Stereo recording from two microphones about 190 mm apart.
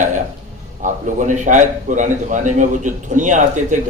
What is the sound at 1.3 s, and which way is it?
A man's voice, 40° right (ahead or behind).